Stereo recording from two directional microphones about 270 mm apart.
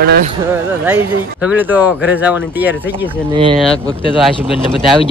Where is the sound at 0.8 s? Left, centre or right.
Centre.